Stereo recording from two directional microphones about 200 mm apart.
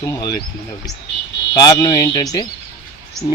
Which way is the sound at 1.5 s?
15° left (ahead or behind).